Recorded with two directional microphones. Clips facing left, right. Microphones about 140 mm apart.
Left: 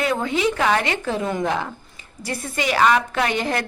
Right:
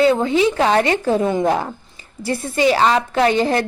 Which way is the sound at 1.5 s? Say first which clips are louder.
Right 5 dB; 40° right (ahead or behind).